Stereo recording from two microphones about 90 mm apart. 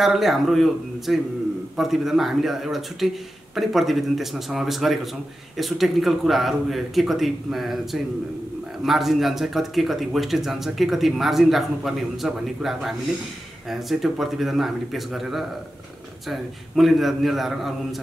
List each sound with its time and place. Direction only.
0.0 s speech: centre (ahead or behind)